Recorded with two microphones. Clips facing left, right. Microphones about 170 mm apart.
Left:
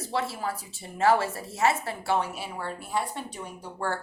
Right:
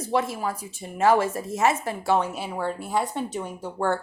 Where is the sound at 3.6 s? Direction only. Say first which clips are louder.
Right 6 dB; 20° right (ahead or behind).